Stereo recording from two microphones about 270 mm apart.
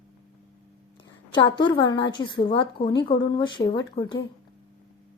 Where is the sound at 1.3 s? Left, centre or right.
Centre.